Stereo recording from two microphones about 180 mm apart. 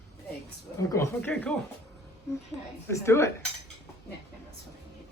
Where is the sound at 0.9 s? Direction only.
15° left (ahead or behind).